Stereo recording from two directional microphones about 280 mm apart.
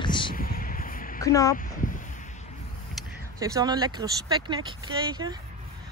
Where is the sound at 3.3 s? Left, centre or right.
Centre.